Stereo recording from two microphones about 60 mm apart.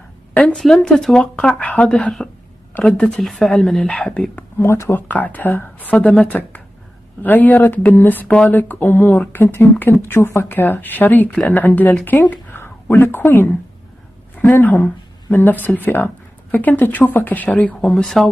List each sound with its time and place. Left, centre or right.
0.3 s a sound: left
0.6 s speech: centre
3.3 s speech: centre
3.8 s speech: centre
4.6 s speech: left
4.9 s speech: left
10.5 s speech: left
12.5 s a sound: left
14.5 s speech: left
17.7 s speech: centre